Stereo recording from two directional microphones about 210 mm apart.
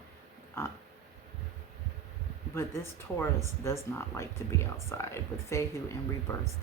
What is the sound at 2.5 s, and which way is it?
Speech, 10° left (ahead or behind).